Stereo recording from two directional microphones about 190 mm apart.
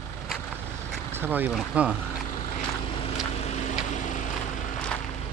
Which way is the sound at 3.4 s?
40° left (ahead or behind).